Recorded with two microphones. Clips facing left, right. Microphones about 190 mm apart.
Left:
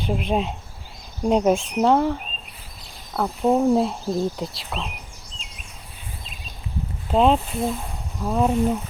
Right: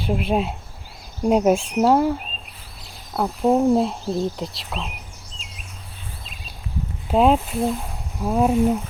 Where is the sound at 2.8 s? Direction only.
Centre (ahead or behind).